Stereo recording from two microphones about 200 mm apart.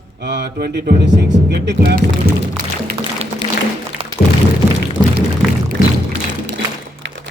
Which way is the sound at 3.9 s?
5° right (ahead or behind).